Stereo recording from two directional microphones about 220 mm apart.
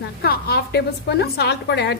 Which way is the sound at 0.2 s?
45° left (ahead or behind).